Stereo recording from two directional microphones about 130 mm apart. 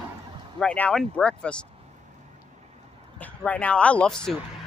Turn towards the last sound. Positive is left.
turn(degrees=5)  # may be behind; listen again after turning